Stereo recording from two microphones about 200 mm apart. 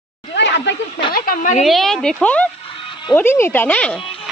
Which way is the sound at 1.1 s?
45° left (ahead or behind).